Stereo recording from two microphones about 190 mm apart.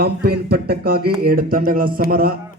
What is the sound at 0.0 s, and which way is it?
A man's voice, 55° right (ahead or behind).